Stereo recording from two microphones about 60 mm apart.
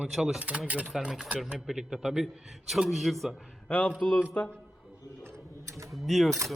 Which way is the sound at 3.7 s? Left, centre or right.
Centre.